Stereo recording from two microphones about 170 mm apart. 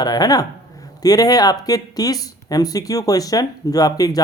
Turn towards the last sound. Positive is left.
turn(degrees=20)  # may be behind; listen again after turning